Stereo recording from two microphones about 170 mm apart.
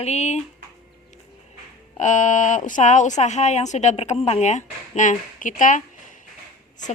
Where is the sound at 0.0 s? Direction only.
40° left (ahead or behind).